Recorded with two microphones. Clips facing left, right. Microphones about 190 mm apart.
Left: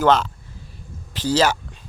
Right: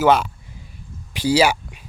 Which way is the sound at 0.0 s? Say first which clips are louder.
Right 1 dB; 10° right (ahead or behind).